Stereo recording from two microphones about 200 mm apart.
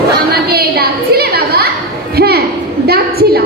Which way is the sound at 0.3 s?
50° right (ahead or behind).